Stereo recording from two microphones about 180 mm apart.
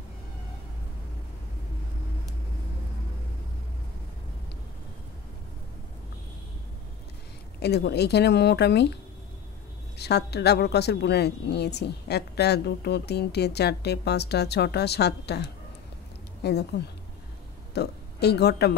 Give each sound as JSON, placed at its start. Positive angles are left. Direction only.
{"t": 7.6, "sound": "a woman's voice", "side_deg": 65}
{"t": 9.9, "sound": "a woman's voice", "side_deg": 65}
{"t": 17.7, "sound": "speech", "side_deg": 65}